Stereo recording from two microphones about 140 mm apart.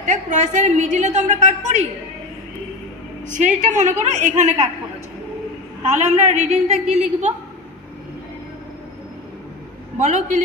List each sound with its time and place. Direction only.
0.0 s a woman's voice: 60° right (ahead or behind)
3.3 s a woman's voice: 60° right (ahead or behind)
5.9 s a woman's voice: 55° right (ahead or behind)
9.9 s a woman's voice: 60° right (ahead or behind)